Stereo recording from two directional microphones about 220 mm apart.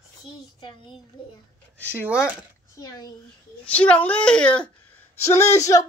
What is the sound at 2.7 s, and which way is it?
Speech, 15° left (ahead or behind).